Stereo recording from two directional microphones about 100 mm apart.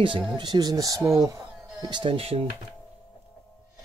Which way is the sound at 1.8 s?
50° right (ahead or behind).